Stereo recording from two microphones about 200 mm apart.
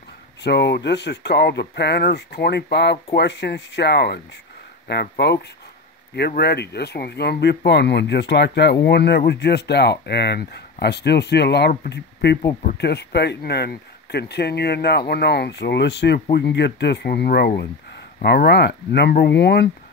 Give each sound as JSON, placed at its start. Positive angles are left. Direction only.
{"t": 0.4, "sound": "speech", "side_deg": 60}